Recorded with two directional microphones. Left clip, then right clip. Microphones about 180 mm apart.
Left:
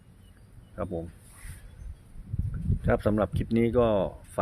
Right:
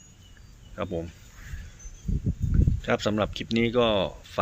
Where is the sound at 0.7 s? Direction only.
Centre (ahead or behind).